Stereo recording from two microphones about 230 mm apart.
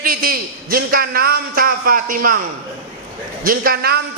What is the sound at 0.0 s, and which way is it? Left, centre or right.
A man's voice, right.